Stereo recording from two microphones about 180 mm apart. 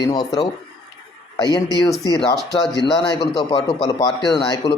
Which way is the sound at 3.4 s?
30° left (ahead or behind).